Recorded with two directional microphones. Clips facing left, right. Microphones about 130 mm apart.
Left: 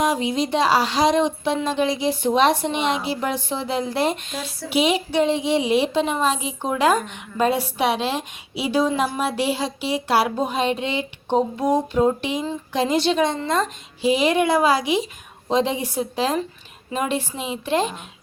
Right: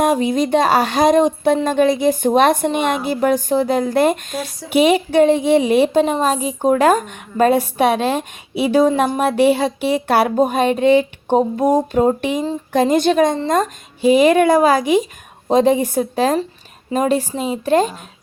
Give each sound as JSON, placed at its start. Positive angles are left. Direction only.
{"t": 0.0, "sound": "a woman's voice", "side_deg": -50}